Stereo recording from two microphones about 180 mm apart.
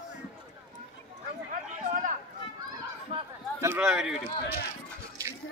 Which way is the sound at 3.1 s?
30° right (ahead or behind).